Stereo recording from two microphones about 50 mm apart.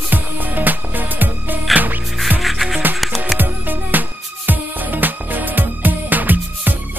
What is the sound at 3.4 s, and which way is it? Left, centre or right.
Music, right.